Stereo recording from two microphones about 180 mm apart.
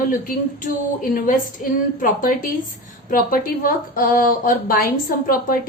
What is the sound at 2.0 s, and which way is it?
A woman's voice, 50° left (ahead or behind).